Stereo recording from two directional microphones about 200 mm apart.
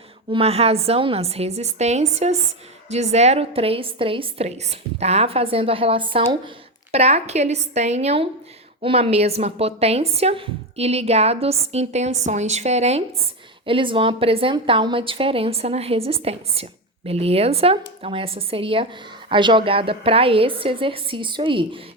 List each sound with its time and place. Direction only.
0.3 s a woman's voice: 30° right (ahead or behind)